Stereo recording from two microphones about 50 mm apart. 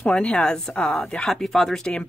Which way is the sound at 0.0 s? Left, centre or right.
Left.